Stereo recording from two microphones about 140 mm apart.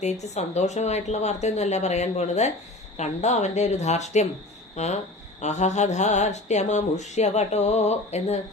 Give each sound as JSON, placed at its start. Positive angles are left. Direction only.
{"t": 0.0, "sound": "speech", "side_deg": 55}